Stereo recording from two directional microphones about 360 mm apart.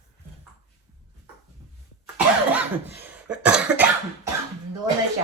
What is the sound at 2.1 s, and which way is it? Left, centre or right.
Cough, centre.